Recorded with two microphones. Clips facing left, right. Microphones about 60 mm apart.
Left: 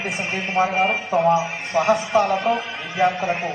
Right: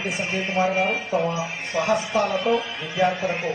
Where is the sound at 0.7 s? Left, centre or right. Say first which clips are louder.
Left 3 dB; left.